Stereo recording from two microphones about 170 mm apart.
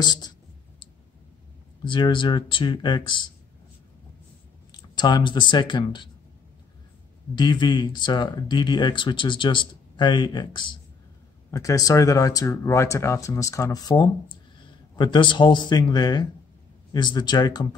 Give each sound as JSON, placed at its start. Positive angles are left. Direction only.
{"t": 0.0, "sound": "speech", "side_deg": 25}
{"t": 1.9, "sound": "speech", "side_deg": 30}
{"t": 4.9, "sound": "speech", "side_deg": 25}
{"t": 7.3, "sound": "speech", "side_deg": 25}